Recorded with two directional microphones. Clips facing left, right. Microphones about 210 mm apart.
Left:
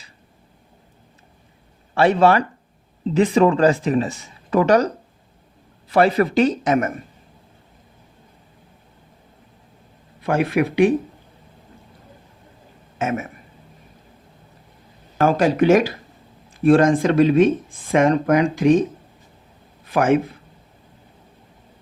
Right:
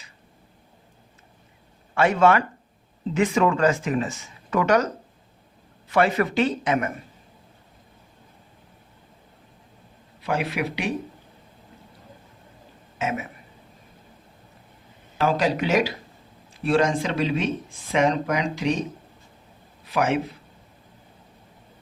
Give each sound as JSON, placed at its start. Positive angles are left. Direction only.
{"t": 2.0, "sound": "speech", "side_deg": 35}
{"t": 5.9, "sound": "speech", "side_deg": 35}
{"t": 10.2, "sound": "speech", "side_deg": 50}
{"t": 13.0, "sound": "speech", "side_deg": 50}
{"t": 15.2, "sound": "a man's voice", "side_deg": 50}